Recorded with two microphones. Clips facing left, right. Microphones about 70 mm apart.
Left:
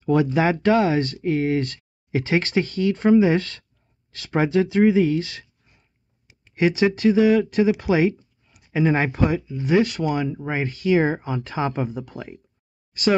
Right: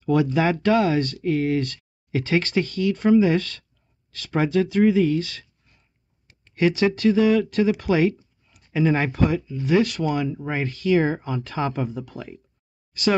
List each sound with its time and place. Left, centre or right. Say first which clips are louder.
0.0 s speech: left 1 dB; left
8.5 s a sound: left 1 dB; centre
8.7 s speech: left 1 dB; left